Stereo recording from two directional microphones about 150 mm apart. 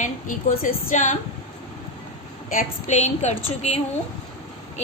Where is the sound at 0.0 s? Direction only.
65° left (ahead or behind).